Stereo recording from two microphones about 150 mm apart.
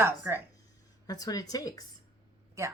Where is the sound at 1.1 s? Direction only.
25° left (ahead or behind).